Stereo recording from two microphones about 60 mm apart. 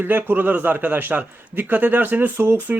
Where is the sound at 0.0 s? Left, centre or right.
Right.